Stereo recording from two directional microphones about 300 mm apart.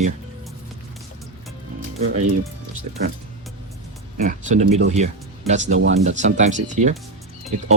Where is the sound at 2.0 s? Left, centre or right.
Right.